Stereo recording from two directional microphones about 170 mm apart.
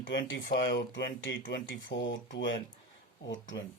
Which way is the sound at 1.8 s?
90° left.